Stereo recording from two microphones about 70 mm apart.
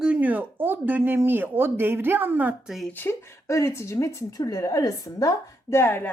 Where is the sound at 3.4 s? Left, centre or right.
Left.